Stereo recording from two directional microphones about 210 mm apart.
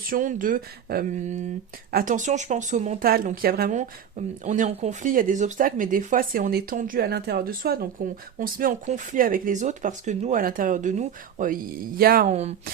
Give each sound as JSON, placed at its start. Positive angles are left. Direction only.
{"t": 0.1, "sound": "speech", "side_deg": -40}
{"t": 12.3, "sound": "speech", "side_deg": -30}